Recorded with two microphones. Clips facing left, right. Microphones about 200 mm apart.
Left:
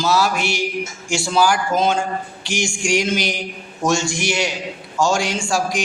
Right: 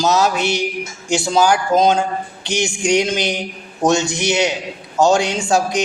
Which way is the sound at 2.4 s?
20° right (ahead or behind).